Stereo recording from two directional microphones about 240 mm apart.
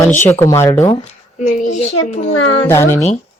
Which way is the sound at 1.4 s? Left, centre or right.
Left.